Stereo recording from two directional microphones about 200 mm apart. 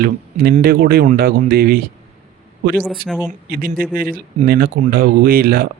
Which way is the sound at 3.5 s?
45° right (ahead or behind).